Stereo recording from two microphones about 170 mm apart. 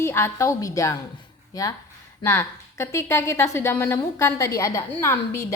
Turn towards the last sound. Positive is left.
turn(degrees=15)  # may be behind; listen again after turning